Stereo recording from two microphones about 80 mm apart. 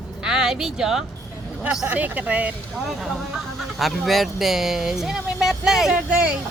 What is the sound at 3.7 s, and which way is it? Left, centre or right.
Speech, centre.